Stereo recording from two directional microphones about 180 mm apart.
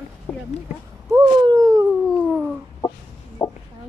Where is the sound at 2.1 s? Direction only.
5° right (ahead or behind).